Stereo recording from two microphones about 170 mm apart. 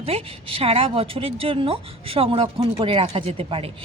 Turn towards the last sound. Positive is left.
turn(degrees=-30)  # may be behind; listen again after turning